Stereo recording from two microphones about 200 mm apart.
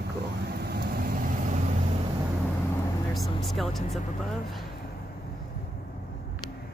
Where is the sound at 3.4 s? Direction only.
Centre (ahead or behind).